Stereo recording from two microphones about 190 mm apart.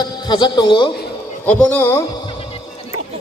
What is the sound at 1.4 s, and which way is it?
Speech, 5° left (ahead or behind).